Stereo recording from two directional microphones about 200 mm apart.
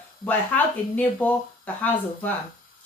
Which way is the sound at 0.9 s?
10° left (ahead or behind).